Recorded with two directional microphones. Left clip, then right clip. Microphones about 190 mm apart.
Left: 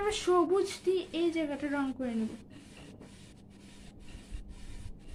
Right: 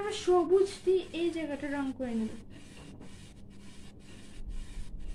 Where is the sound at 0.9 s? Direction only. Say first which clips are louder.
Right 1 dB; 30° left (ahead or behind).